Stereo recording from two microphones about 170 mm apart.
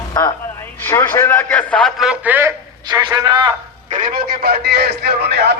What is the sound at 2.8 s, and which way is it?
Speech, 25° right (ahead or behind).